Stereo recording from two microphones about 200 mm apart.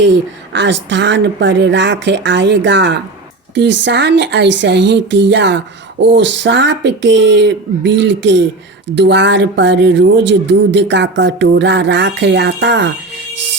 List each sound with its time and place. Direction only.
0.0 s speech: 60° right (ahead or behind)